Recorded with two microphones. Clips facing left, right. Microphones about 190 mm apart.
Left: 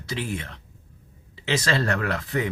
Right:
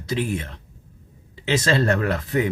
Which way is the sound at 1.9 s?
20° right (ahead or behind).